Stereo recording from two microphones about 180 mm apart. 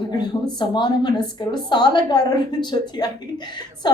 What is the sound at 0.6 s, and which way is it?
A woman's voice, 25° left (ahead or behind).